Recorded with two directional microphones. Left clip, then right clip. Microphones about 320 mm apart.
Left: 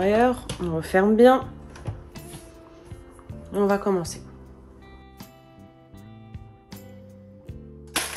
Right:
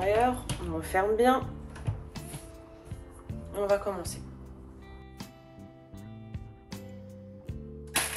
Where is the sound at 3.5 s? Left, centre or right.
Left.